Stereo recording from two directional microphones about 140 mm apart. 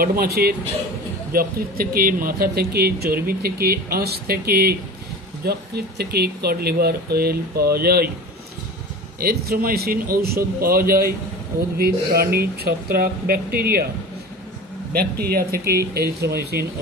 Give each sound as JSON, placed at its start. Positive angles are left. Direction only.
{"t": 0.0, "sound": "speech", "side_deg": -90}
{"t": 9.2, "sound": "speech", "side_deg": -90}
{"t": 14.9, "sound": "speech", "side_deg": -90}